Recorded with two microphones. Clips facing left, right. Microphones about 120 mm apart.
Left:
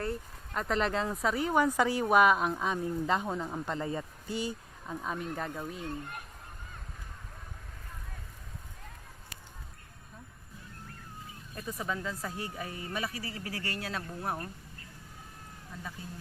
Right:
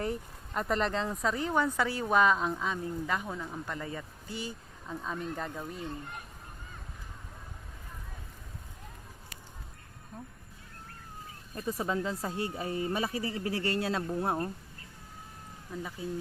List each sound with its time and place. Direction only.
0.5 s speech: centre (ahead or behind); by 4.9 s 15° left (ahead or behind)
4.9 s speech: 5° left (ahead or behind)
11.8 s speech: 30° right (ahead or behind)